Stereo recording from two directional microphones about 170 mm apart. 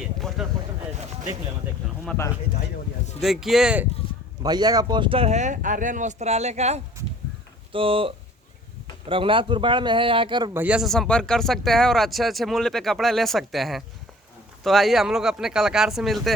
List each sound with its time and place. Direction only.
0.0 s vehicle: centre (ahead or behind)
0.9 s a sound: 45° right (ahead or behind)
3.2 s speech: centre (ahead or behind)
4.4 s a man's voice: 25° right (ahead or behind)
10.5 s speech: 10° right (ahead or behind)